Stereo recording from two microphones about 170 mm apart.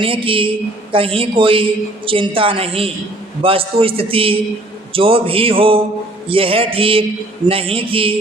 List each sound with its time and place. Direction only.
0.0 s a man's voice: 30° right (ahead or behind)